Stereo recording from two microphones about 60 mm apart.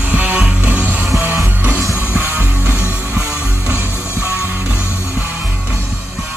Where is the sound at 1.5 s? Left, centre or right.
Right.